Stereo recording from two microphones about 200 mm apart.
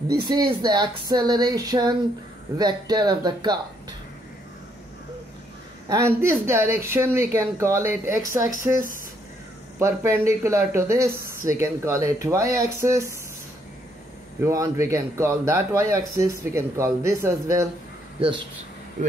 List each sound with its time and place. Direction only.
0.1 s speech: 20° right (ahead or behind)
5.9 s speech: 15° right (ahead or behind)
9.8 s speech: 15° right (ahead or behind)
14.4 s speech: 15° right (ahead or behind)